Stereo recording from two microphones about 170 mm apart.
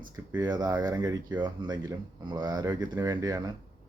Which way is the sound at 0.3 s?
25° right (ahead or behind).